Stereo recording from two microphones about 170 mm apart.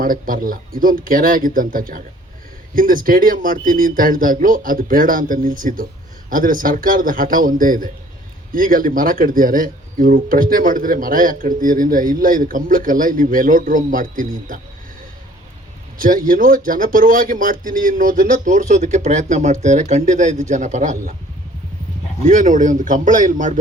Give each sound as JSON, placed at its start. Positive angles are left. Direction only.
{"t": 0.0, "sound": "speech", "side_deg": -55}
{"t": 16.0, "sound": "speech", "side_deg": -55}
{"t": 22.2, "sound": "speech", "side_deg": -50}